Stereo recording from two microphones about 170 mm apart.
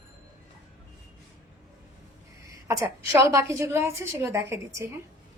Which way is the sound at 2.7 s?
15° right (ahead or behind).